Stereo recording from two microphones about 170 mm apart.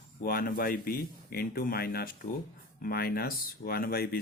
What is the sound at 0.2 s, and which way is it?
Speech, 60° left (ahead or behind).